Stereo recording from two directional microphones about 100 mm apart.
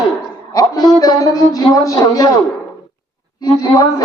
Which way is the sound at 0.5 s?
40° left (ahead or behind).